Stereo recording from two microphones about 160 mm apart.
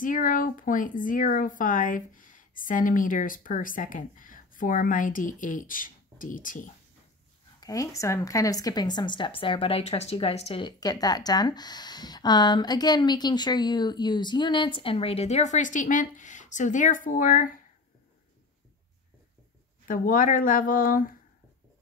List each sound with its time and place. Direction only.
0.0 s speech: 55° left (ahead or behind)
7.6 s speech: 20° left (ahead or behind); by 10.7 s 40° left (ahead or behind)
10.8 s speech: 25° left (ahead or behind); by 17.5 s 55° left (ahead or behind)
19.9 s speech: 60° left (ahead or behind)